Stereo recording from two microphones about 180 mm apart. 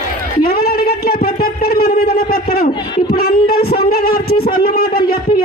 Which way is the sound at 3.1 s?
60° left (ahead or behind).